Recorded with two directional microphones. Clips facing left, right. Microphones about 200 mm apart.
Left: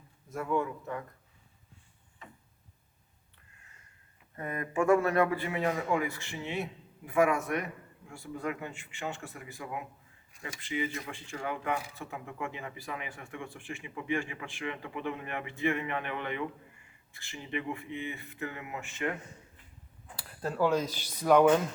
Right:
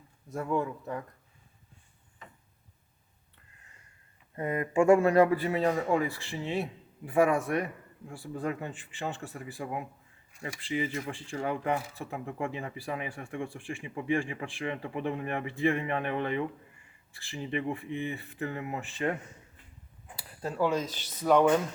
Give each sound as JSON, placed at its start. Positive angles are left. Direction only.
{"t": 0.3, "sound": "speech", "side_deg": -30}
{"t": 4.4, "sound": "speech", "side_deg": -25}
{"t": 10.6, "sound": "speech", "side_deg": -30}
{"t": 20.1, "sound": "a sound", "side_deg": -5}
{"t": 20.7, "sound": "a man's voice", "side_deg": 10}